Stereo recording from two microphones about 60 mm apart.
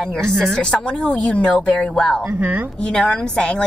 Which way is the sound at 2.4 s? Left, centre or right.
Right.